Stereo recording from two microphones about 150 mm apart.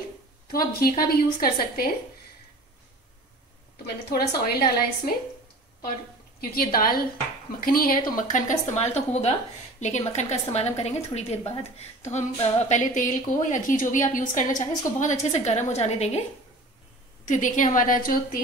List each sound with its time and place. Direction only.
0.5 s a woman's voice: 90° left
3.7 s a woman's voice: 90° left
6.5 s a woman's voice: 80° left
7.6 s speech: 70° left (ahead or behind)
8.2 s a woman's voice: 60° left (ahead or behind)
17.3 s a woman's voice: 55° left (ahead or behind)